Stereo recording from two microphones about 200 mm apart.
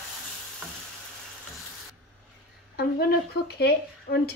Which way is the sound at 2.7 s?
50° left (ahead or behind).